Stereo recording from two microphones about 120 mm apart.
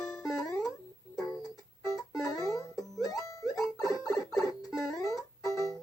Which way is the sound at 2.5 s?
30° left (ahead or behind).